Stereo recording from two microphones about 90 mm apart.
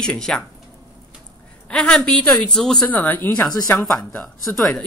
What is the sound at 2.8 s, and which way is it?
Speech, 20° left (ahead or behind).